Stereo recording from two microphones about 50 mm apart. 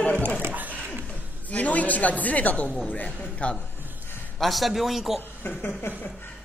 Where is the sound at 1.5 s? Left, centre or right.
Left.